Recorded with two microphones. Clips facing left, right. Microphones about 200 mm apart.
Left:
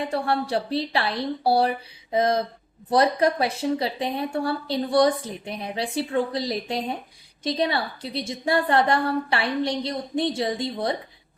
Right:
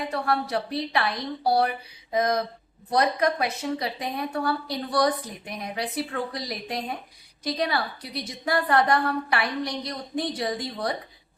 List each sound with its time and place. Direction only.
0.0 s speech: 30° left (ahead or behind)